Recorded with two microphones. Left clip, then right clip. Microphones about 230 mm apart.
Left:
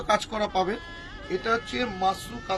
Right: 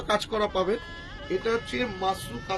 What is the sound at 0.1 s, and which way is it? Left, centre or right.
Speech, left.